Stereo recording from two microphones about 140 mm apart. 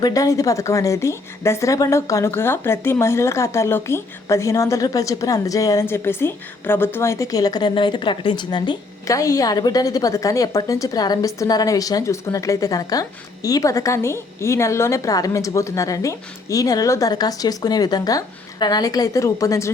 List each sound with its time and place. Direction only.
0.0 s a woman's voice: 25° left (ahead or behind)